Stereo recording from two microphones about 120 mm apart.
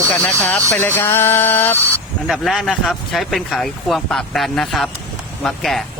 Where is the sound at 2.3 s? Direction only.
Centre (ahead or behind).